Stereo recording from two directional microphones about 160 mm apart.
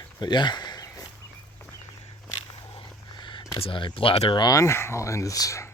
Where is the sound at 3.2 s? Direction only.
30° left (ahead or behind).